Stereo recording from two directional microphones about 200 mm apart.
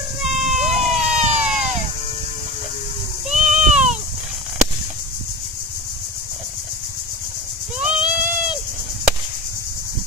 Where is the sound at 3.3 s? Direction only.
35° right (ahead or behind).